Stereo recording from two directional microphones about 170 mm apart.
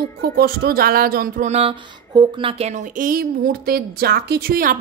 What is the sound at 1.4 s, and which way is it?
A woman's voice, 35° right (ahead or behind).